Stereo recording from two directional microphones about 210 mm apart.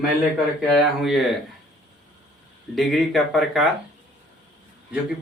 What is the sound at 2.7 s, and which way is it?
Speech, centre (ahead or behind).